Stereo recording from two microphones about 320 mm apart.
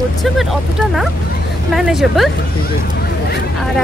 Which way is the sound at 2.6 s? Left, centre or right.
Left.